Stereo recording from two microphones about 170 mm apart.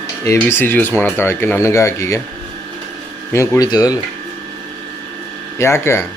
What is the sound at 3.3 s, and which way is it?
Speech, 15° left (ahead or behind).